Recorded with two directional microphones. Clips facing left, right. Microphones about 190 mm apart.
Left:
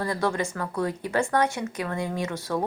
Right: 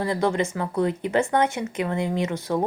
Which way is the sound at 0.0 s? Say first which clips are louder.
Right 3 dB; 20° right (ahead or behind).